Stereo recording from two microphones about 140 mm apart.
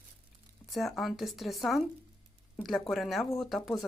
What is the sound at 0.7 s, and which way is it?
Speech, centre (ahead or behind).